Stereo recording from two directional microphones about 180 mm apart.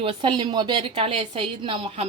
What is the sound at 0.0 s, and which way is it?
A woman's voice, 30° right (ahead or behind).